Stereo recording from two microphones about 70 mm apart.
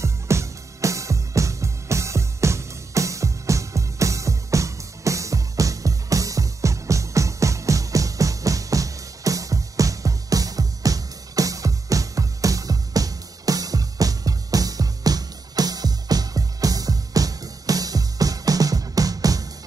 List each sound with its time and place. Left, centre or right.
0.0 s music: right